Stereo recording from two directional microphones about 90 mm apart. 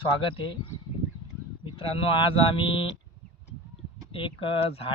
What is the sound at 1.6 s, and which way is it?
Speech, 90° left.